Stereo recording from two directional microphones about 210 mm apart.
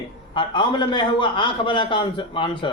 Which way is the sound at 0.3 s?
20° left (ahead or behind).